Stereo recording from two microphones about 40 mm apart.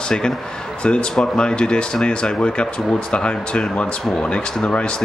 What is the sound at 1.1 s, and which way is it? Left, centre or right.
Speech, centre.